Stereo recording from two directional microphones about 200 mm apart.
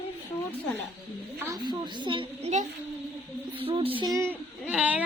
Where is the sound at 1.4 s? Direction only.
20° right (ahead or behind).